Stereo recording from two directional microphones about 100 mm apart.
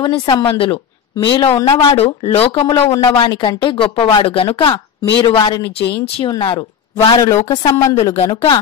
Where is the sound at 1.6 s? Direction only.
80° left.